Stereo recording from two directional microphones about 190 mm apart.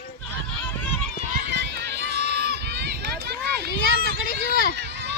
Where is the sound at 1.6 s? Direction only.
65° right (ahead or behind).